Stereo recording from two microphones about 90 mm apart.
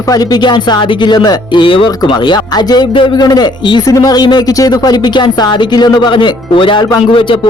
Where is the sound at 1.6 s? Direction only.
75° left (ahead or behind).